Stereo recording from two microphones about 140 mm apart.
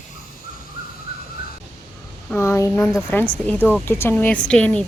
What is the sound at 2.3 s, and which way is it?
Speech, 15° left (ahead or behind).